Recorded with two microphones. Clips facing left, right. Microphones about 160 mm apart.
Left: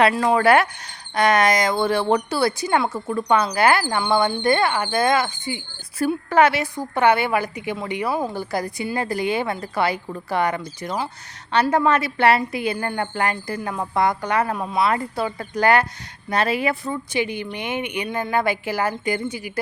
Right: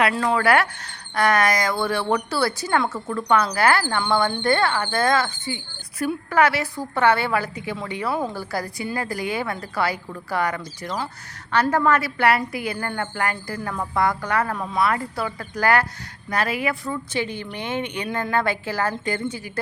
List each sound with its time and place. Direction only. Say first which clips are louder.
0.1 s a woman's voice: left 3 dB; 20° left (ahead or behind)